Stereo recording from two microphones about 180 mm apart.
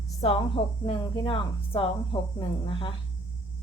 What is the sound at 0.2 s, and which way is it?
Speech, 30° left (ahead or behind).